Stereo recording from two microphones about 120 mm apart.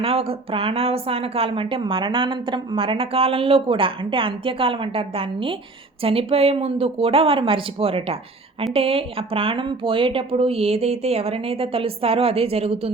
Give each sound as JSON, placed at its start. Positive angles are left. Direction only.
{"t": 0.0, "sound": "a woman's voice", "side_deg": -55}